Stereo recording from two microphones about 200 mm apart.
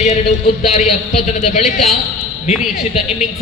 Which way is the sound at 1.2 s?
35° left (ahead or behind).